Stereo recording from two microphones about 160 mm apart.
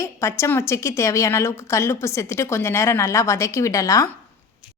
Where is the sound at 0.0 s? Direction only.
15° left (ahead or behind).